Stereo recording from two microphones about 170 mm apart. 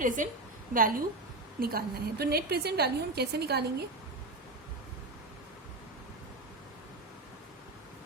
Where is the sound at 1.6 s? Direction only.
60° right (ahead or behind).